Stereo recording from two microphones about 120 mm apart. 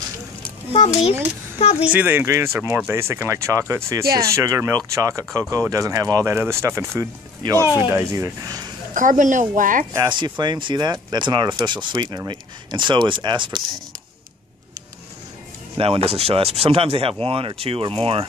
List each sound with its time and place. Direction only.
0.7 s a child's voice: 55° left (ahead or behind)
1.9 s speech: 15° right (ahead or behind); by 8.7 s 35° right (ahead or behind)
8.9 s speech: 90° right
10.0 s speech: 40° right (ahead or behind)
15.8 s speech: 50° right (ahead or behind)